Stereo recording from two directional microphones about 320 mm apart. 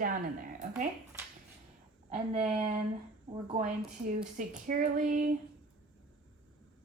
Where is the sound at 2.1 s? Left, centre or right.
Centre.